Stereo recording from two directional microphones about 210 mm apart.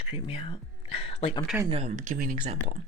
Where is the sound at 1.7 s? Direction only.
30° right (ahead or behind).